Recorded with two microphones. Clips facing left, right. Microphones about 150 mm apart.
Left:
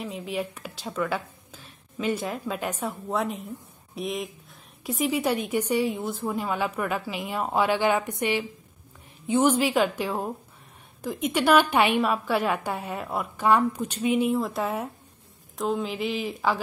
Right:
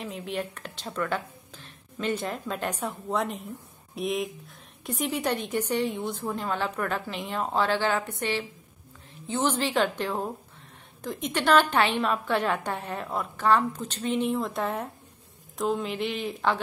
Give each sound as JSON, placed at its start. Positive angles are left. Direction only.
{"t": 0.0, "sound": "a woman's voice", "side_deg": 0}